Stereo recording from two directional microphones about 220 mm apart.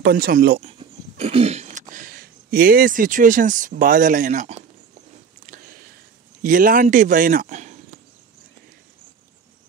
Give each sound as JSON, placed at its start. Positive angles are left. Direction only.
{"t": 0.0, "sound": "speech", "side_deg": -45}
{"t": 0.7, "sound": "a sound", "side_deg": -25}
{"t": 6.4, "sound": "speech", "side_deg": -40}